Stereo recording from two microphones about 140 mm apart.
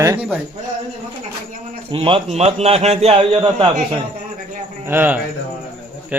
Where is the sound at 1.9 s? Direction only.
40° right (ahead or behind).